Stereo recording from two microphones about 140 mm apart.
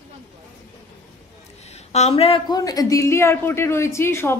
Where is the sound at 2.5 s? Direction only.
25° left (ahead or behind).